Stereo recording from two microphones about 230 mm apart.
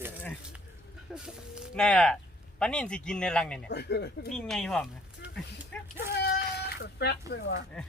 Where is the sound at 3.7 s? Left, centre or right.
Left.